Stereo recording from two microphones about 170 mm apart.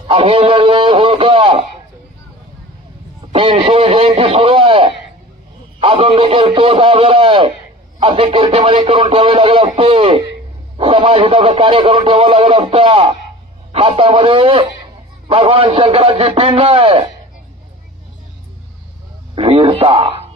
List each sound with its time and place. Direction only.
0.1 s speech: 35° right (ahead or behind)
3.3 s a man's voice: 30° right (ahead or behind)
19.3 s a sound: 35° right (ahead or behind)